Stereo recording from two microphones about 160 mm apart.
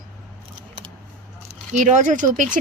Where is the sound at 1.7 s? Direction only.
50° right (ahead or behind).